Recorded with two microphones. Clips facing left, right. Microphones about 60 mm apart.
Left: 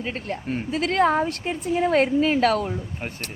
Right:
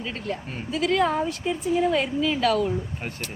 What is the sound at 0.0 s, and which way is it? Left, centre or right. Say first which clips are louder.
A woman's voice: left 2 dB; left.